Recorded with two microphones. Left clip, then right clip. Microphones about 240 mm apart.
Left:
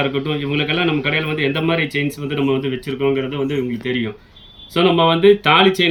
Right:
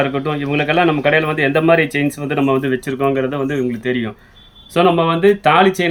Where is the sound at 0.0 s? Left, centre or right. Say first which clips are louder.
Right 2 dB; centre.